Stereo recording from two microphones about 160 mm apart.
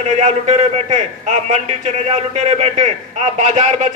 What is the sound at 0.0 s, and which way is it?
A man's voice, 45° right (ahead or behind).